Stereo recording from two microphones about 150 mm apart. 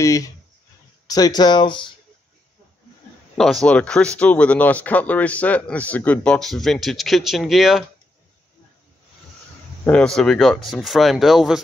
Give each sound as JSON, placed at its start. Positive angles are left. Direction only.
{"t": 0.0, "sound": "speech", "side_deg": 20}
{"t": 3.3, "sound": "speech", "side_deg": 0}
{"t": 9.8, "sound": "speech", "side_deg": 5}